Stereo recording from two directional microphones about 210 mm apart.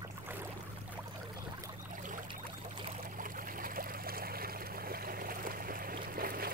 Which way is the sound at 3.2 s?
40° right (ahead or behind).